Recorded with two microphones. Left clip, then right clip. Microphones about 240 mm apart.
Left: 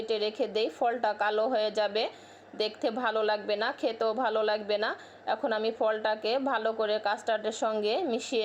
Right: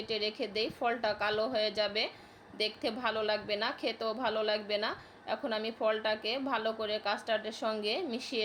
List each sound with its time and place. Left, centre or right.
0.0 s a woman's voice: centre